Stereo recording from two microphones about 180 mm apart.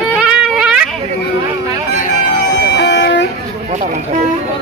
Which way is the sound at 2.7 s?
70° left (ahead or behind).